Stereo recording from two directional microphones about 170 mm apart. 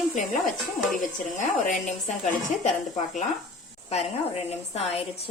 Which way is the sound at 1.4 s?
45° left (ahead or behind).